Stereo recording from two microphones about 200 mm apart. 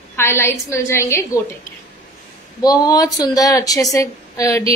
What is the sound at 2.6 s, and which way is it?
A woman's voice, 20° left (ahead or behind).